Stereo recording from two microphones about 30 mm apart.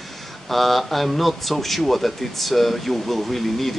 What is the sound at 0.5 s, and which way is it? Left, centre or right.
Speech, centre.